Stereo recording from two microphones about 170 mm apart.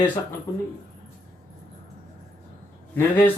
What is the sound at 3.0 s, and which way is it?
Speech, 10° left (ahead or behind).